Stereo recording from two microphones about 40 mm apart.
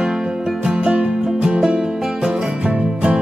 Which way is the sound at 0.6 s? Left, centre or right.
Centre.